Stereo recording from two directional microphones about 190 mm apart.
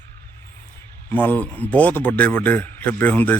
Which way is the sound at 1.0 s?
10° left (ahead or behind).